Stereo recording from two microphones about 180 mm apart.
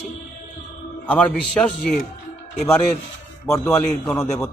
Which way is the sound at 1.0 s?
5° left (ahead or behind).